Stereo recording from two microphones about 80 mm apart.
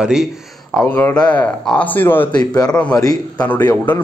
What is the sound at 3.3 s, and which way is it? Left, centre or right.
Speech, centre.